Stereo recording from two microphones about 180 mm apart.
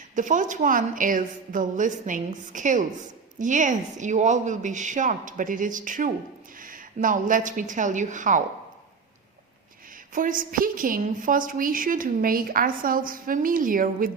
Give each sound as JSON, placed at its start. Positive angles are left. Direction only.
{"t": 0.2, "sound": "a woman's voice", "side_deg": -45}
{"t": 10.2, "sound": "a woman's voice", "side_deg": -50}